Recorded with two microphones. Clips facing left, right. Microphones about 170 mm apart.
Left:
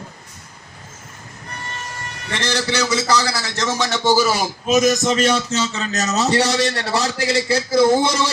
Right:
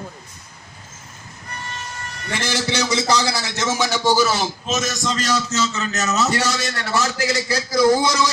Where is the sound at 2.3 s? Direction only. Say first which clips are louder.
Left 1 dB; 10° right (ahead or behind).